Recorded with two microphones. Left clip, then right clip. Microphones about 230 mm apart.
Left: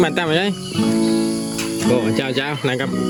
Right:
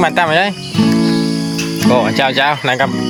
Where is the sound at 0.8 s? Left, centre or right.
Right.